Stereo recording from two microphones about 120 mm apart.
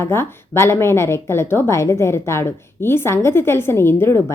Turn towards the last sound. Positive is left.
turn(degrees=20)  # may be behind; listen again after turning